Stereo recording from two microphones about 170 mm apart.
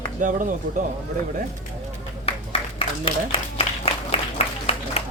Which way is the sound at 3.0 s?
35° left (ahead or behind).